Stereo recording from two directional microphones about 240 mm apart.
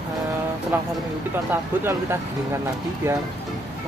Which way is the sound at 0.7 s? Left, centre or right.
Centre.